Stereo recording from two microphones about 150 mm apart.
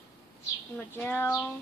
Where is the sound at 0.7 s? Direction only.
15° left (ahead or behind).